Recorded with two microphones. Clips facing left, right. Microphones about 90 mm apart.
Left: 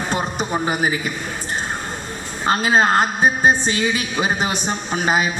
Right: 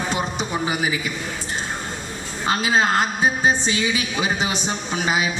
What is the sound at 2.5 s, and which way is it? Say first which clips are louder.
A woman's voice: left 3 dB; 45° left (ahead or behind).